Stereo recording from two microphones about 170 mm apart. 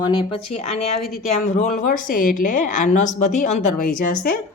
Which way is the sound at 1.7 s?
55° left (ahead or behind).